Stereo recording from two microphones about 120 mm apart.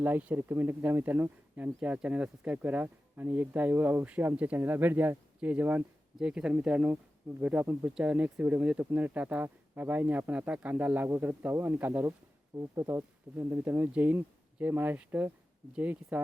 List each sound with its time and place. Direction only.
0.0 s speech: 15° right (ahead or behind)